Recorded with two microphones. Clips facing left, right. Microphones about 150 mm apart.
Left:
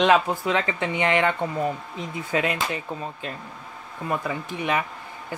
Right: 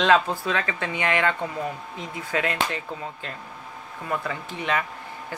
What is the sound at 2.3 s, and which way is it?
Speech, 20° left (ahead or behind).